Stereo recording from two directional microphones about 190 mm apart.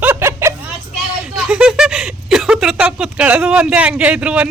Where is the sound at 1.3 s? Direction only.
5° right (ahead or behind).